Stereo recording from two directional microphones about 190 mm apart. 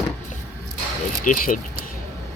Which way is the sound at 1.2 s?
45° left (ahead or behind).